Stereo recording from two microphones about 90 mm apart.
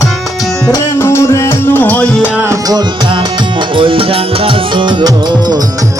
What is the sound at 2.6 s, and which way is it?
Music, 55° right (ahead or behind).